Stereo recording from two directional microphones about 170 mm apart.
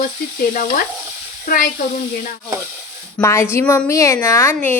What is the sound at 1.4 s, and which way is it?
Speech, 55° left (ahead or behind).